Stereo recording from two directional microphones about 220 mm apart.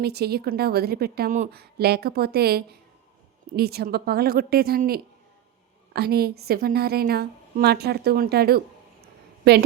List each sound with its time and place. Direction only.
0.0 s a woman's voice: 45° right (ahead or behind)